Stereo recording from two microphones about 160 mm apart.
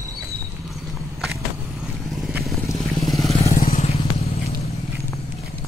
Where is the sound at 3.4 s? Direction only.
55° left (ahead or behind).